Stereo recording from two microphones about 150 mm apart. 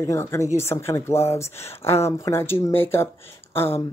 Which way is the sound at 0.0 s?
20° left (ahead or behind).